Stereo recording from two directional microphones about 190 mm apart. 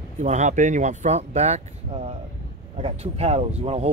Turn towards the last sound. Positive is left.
turn(degrees=-30)  # may be behind; listen again after turning